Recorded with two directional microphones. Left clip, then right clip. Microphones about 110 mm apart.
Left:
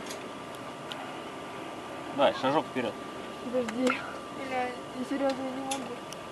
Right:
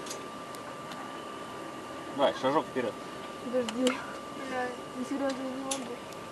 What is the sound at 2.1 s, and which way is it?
Speech, 25° left (ahead or behind).